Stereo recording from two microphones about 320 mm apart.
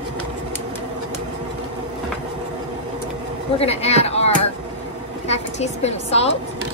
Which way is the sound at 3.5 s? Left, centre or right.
Centre.